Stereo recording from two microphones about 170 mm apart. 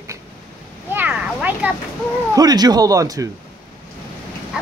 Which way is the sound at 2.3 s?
25° right (ahead or behind).